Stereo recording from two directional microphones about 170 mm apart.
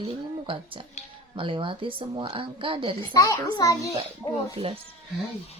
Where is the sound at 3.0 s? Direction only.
20° left (ahead or behind).